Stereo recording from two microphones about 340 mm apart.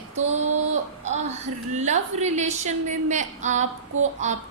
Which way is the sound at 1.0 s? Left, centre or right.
Centre.